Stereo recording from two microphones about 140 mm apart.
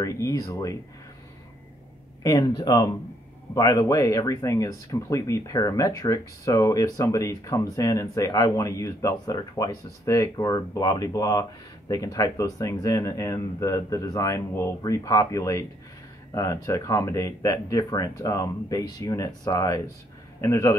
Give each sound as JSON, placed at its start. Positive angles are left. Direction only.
{"t": 0.0, "sound": "speech", "side_deg": 25}
{"t": 2.2, "sound": "speech", "side_deg": 25}